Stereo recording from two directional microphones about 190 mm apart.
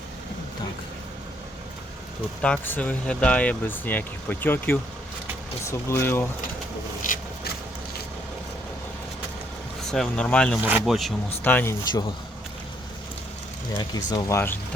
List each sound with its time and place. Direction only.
2.4 s speech: 5° left (ahead or behind)
5.9 s speech: 10° left (ahead or behind)
7.1 s a sound: 45° left (ahead or behind)
9.9 s speech: 5° left (ahead or behind)
10.6 s speech: 10° right (ahead or behind)
11.4 s speech: 10° left (ahead or behind)
14.1 s speech: 20° left (ahead or behind)